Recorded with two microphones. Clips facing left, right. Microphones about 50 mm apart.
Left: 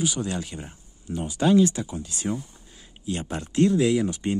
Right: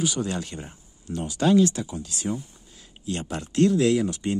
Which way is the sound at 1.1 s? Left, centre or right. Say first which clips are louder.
Even; centre.